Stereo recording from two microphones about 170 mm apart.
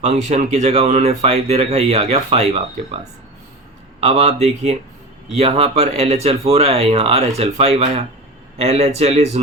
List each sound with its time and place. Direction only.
0.0 s speech: 45° right (ahead or behind)
4.0 s speech: 40° right (ahead or behind)